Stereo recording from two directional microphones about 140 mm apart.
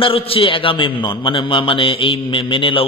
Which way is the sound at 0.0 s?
40° left (ahead or behind).